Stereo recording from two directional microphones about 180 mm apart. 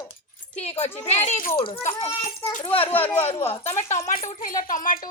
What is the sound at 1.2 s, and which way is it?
Speech, 45° left (ahead or behind).